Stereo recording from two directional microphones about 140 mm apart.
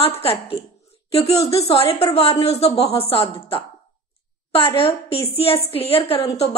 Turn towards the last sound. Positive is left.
turn(degrees=40)  # may be behind; listen again after turning